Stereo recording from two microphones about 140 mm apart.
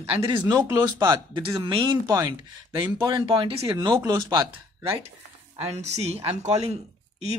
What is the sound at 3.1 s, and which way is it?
Speech, 35° right (ahead or behind).